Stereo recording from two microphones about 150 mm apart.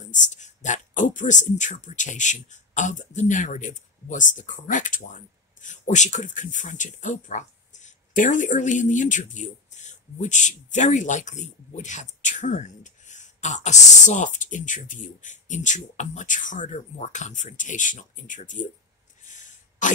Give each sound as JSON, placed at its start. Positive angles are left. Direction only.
{"t": 0.0, "sound": "speech", "side_deg": 55}
{"t": 19.2, "sound": "throat clearing", "side_deg": 55}